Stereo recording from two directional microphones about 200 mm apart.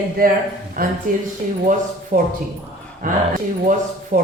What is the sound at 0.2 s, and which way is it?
Speech, 45° right (ahead or behind).